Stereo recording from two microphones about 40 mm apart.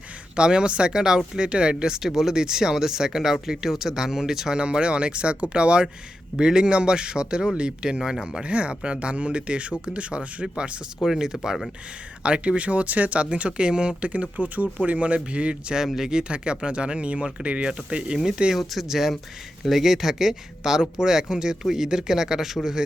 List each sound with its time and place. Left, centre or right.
0.3 s a man's voice: right
1.7 s speech: centre
4.5 s a man's voice: right
11.2 s a man's voice: centre
18.5 s speech: centre